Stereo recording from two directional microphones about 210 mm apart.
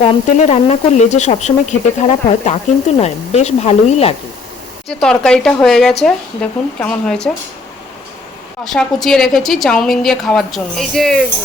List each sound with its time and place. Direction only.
0.0 s speech: 35° left (ahead or behind)
4.9 s a woman's voice: 5° left (ahead or behind)
8.6 s a woman's voice: centre (ahead or behind)